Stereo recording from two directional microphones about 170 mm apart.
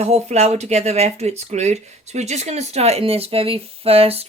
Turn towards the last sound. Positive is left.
turn(degrees=-35)  # may be behind; listen again after turning